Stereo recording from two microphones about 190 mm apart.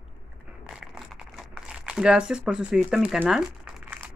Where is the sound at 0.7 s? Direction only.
Centre (ahead or behind).